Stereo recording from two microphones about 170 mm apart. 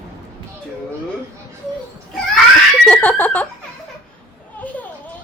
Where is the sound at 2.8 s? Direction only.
5° left (ahead or behind).